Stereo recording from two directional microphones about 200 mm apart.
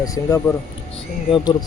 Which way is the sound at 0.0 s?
15° left (ahead or behind).